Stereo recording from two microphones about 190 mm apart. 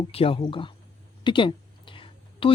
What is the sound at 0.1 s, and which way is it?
A woman's voice, 30° left (ahead or behind).